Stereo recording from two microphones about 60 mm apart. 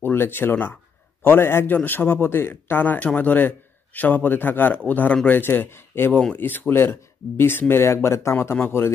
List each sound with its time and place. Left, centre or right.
0.0 s speech: left
5.4 s speech: left
8.5 s speech: left